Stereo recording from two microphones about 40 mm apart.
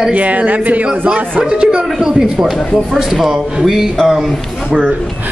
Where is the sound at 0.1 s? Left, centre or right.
Right.